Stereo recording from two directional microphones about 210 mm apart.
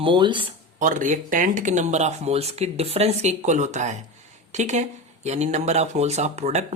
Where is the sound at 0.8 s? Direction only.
35° right (ahead or behind).